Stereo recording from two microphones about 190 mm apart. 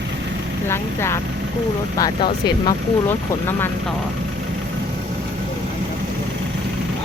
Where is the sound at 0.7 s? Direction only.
15° left (ahead or behind).